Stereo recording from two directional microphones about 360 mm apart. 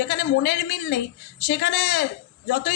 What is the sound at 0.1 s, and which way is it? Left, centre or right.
A man's voice, left.